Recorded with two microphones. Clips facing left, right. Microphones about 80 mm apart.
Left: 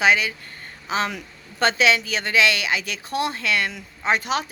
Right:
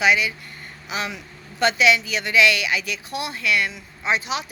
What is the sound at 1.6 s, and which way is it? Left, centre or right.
Speech, left.